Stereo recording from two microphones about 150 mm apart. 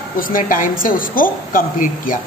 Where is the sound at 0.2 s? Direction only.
65° left (ahead or behind).